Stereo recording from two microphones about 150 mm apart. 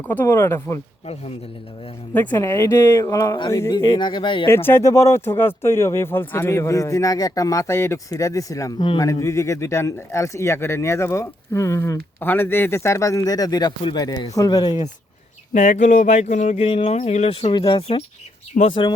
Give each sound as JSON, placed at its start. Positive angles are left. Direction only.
{"t": 0.1, "sound": "speech", "side_deg": 15}
{"t": 2.1, "sound": "speech", "side_deg": 15}
{"t": 4.4, "sound": "speech", "side_deg": 15}
{"t": 15.5, "sound": "speech", "side_deg": 60}
{"t": 17.5, "sound": "speech", "side_deg": 30}